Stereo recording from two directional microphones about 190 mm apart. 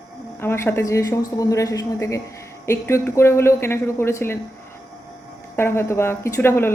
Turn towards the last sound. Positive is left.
turn(degrees=10)  # may be behind; listen again after turning